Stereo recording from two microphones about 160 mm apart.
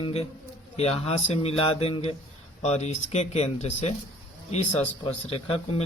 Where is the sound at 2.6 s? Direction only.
45° left (ahead or behind).